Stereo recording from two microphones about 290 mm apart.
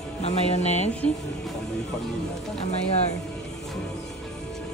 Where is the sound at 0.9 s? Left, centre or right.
Centre.